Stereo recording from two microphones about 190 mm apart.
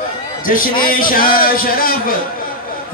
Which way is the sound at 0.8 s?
50° left (ahead or behind).